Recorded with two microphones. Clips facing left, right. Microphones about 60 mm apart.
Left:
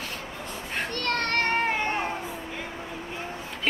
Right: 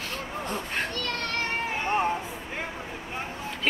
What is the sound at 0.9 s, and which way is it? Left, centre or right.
Children playing, left.